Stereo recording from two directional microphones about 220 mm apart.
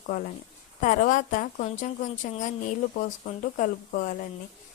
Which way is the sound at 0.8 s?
35° left (ahead or behind).